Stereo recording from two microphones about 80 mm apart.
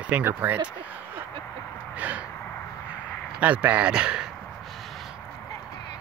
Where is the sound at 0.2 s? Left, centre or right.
Right.